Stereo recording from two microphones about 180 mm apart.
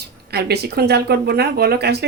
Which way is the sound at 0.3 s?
65° right (ahead or behind).